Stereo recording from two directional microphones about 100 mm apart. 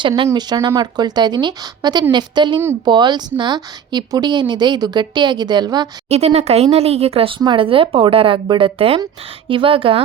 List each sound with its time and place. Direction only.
0.3 s speech: 45° right (ahead or behind)
6.1 s speech: 90° right; by 10.0 s 65° right (ahead or behind)